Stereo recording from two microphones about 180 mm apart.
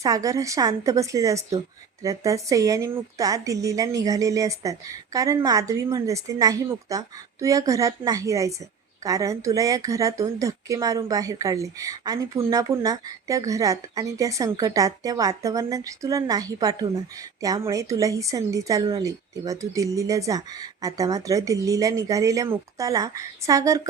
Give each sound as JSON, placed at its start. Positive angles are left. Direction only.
{"t": 0.0, "sound": "a woman's voice", "side_deg": -20}